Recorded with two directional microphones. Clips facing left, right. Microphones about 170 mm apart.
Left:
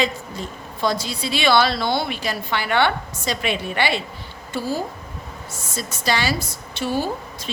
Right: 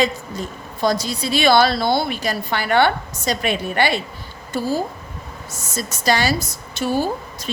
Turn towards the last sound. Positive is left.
turn(degrees=-40)  # may be behind; listen again after turning